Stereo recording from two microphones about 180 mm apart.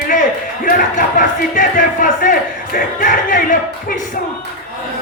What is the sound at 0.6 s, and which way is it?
Speech, 45° left (ahead or behind).